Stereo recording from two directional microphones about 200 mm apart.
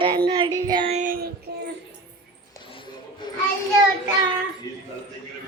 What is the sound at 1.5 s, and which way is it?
Music, 55° right (ahead or behind).